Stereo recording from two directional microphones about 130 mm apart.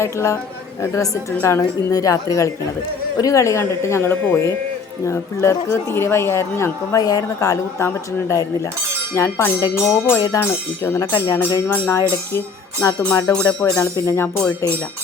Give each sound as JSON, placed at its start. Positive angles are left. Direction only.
{"t": 0.0, "sound": "speech", "side_deg": 20}
{"t": 9.6, "sound": "music", "side_deg": 30}
{"t": 10.1, "sound": "speech", "side_deg": 20}
{"t": 13.3, "sound": "music", "side_deg": 10}
{"t": 13.9, "sound": "speech", "side_deg": 20}